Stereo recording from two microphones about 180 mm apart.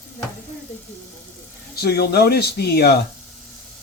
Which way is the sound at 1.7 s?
65° left (ahead or behind).